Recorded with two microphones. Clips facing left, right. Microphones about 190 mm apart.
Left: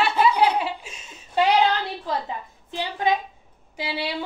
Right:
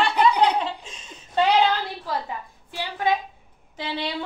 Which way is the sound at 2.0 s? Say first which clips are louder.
Left 1 dB; 20° left (ahead or behind).